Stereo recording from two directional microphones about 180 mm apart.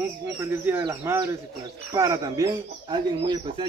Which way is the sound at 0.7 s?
15° right (ahead or behind).